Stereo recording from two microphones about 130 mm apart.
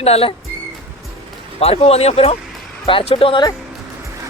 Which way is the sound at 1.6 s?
50° left (ahead or behind).